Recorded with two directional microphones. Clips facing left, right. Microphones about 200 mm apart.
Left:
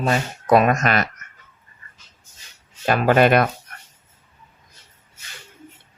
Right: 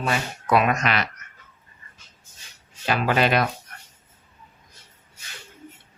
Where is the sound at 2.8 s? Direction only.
50° left (ahead or behind).